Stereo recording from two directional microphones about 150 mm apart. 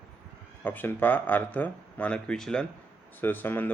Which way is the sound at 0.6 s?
15° left (ahead or behind).